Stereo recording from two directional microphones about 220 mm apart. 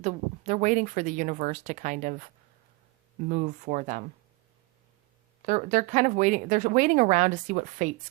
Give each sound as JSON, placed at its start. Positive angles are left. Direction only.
{"t": 0.0, "sound": "speech", "side_deg": -35}
{"t": 5.5, "sound": "speech", "side_deg": -35}